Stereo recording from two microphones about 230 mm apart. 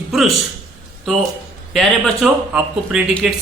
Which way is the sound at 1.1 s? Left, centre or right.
Centre.